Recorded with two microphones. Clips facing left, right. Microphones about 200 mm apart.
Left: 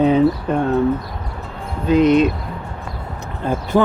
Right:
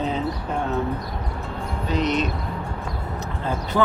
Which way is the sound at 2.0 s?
55° left (ahead or behind).